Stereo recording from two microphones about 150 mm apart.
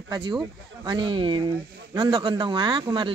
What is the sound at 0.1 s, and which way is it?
Speech, 30° right (ahead or behind).